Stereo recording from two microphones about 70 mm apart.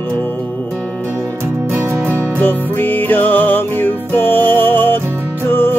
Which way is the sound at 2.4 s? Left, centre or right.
Left.